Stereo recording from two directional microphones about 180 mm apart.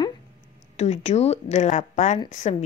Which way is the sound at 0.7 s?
35° left (ahead or behind).